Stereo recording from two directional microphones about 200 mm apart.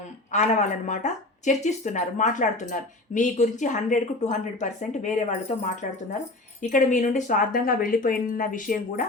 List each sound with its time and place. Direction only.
0.3 s a woman's voice: 35° left (ahead or behind)